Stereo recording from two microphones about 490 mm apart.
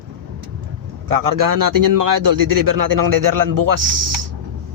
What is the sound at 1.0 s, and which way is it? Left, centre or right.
Speech, right.